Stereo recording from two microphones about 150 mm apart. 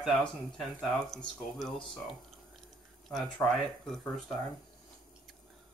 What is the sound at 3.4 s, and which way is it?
Speech, centre (ahead or behind).